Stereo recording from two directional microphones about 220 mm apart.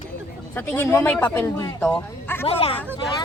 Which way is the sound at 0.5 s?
10° left (ahead or behind).